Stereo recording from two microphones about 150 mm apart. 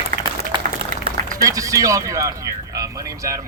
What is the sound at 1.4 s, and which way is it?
Speech, 20° right (ahead or behind).